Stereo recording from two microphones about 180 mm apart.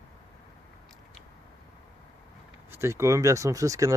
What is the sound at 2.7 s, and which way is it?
Speech, 15° right (ahead or behind).